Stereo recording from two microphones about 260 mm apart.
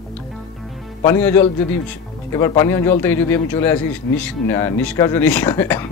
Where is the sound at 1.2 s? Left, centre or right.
Centre.